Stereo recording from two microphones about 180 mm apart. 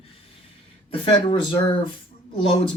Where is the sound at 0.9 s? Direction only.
30° left (ahead or behind).